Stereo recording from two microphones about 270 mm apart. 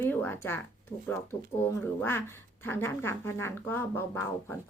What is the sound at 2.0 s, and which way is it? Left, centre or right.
Speech, centre.